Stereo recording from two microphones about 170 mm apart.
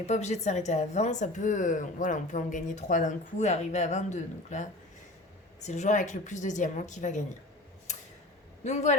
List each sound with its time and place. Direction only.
0.0 s a woman's voice: 40° left (ahead or behind)
8.6 s a woman's voice: 45° left (ahead or behind)